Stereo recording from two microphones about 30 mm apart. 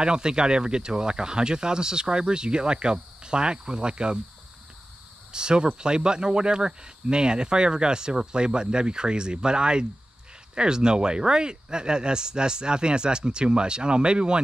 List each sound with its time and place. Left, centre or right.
0.0 s speech: right
5.3 s cricket: right
5.8 s speech: right